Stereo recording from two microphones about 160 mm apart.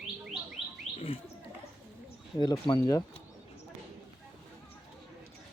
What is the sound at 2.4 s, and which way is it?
Speech, 25° left (ahead or behind).